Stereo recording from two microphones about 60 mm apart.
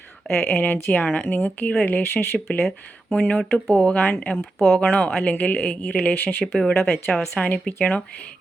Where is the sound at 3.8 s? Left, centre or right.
Left.